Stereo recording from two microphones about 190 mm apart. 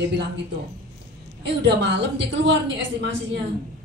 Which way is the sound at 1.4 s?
60° right (ahead or behind).